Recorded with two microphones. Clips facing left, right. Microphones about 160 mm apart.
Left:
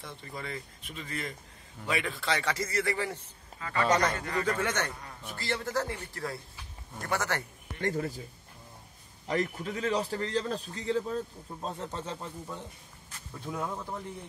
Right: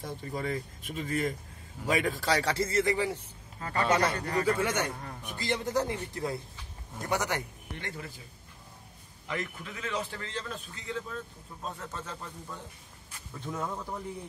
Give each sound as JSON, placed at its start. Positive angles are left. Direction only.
{"t": 0.0, "sound": "a man's voice", "side_deg": -40}
{"t": 3.7, "sound": "speech", "side_deg": -5}
{"t": 4.2, "sound": "a man's voice", "side_deg": -40}
{"t": 4.5, "sound": "a man's voice", "side_deg": -10}
{"t": 7.8, "sound": "a man's voice", "side_deg": 40}
{"t": 9.3, "sound": "a man's voice", "side_deg": 35}
{"t": 13.3, "sound": "speech", "side_deg": 5}